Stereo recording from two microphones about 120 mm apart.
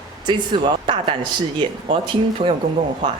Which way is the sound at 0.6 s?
45° right (ahead or behind).